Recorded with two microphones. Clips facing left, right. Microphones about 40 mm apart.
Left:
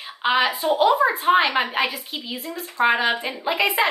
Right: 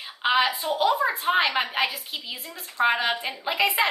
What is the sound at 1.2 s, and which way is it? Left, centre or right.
Speech, centre.